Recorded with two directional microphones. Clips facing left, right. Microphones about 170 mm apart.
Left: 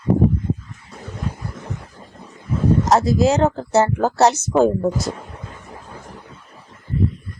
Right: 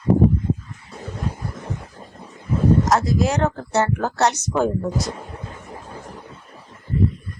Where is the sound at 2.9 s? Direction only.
25° left (ahead or behind).